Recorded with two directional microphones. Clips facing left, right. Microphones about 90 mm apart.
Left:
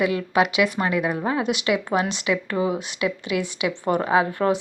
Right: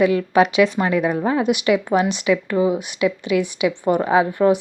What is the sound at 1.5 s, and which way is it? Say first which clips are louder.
Speech: right 5 dB; 25° right (ahead or behind).